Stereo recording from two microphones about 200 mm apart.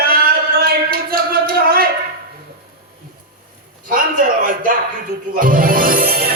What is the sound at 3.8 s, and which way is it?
Speech, 45° right (ahead or behind).